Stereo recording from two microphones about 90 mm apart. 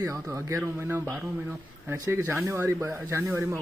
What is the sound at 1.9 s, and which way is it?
Speech, 40° right (ahead or behind).